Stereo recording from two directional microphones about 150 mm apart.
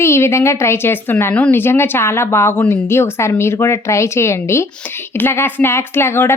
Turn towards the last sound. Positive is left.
turn(degrees=15)  # may be behind; listen again after turning